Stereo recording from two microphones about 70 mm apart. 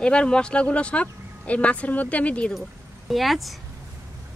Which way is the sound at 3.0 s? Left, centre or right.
Centre.